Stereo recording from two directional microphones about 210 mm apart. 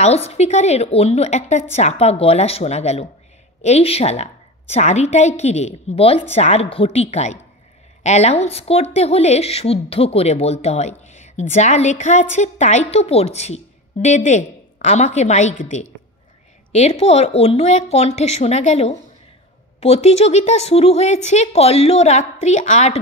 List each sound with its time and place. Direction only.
0.0 s a woman's voice: 30° left (ahead or behind)